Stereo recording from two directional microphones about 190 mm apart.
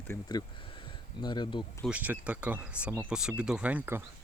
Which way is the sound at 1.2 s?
25° left (ahead or behind).